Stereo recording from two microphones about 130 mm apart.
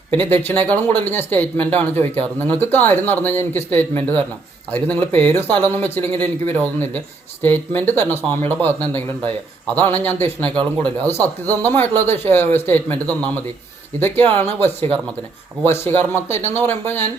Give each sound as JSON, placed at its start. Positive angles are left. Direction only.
{"t": 0.2, "sound": "speech", "side_deg": 15}
{"t": 10.5, "sound": "speech", "side_deg": -35}
{"t": 11.0, "sound": "speech", "side_deg": 15}